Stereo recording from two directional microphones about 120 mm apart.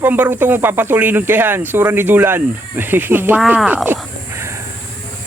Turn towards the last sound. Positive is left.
turn(degrees=-20)  # may be behind; listen again after turning